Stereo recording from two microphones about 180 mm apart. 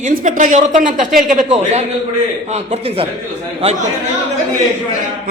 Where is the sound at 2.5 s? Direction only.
35° right (ahead or behind).